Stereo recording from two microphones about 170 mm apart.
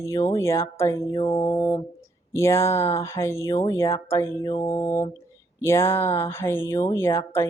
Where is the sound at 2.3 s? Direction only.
15° left (ahead or behind).